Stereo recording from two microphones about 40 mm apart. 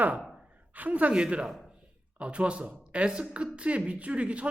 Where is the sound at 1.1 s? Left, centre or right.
Right.